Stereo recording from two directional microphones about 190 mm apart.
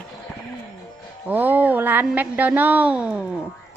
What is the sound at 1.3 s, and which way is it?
Speech, 10° right (ahead or behind).